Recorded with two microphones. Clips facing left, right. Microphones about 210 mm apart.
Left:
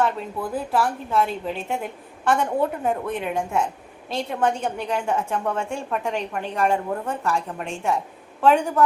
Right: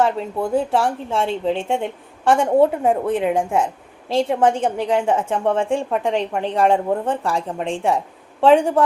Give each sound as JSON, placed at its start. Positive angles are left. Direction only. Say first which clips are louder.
{"t": 0.0, "sound": "speech", "louder": "right 5 dB", "side_deg": -30}
{"t": 3.2, "sound": "speech", "louder": "right 7 dB", "side_deg": -90}
{"t": 4.2, "sound": "a woman's voice", "louder": "right 6 dB", "side_deg": -30}